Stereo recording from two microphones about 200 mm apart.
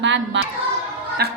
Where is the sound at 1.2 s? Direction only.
50° right (ahead or behind).